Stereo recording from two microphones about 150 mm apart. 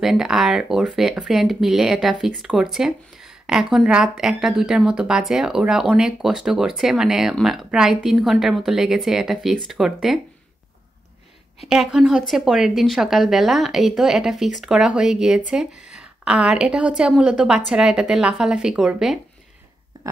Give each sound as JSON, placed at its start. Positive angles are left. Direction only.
{"t": 0.0, "sound": "a woman's voice", "side_deg": -5}
{"t": 11.7, "sound": "a woman's voice", "side_deg": -5}
{"t": 19.9, "sound": "a sound", "side_deg": -25}